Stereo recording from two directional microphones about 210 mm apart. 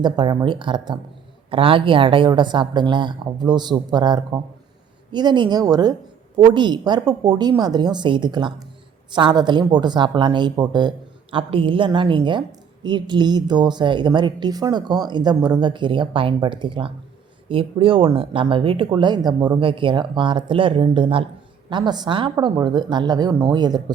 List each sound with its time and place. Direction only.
0.0 s speech: 20° right (ahead or behind)